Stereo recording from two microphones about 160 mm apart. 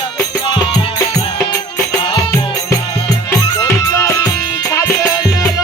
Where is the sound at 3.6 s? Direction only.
15° left (ahead or behind).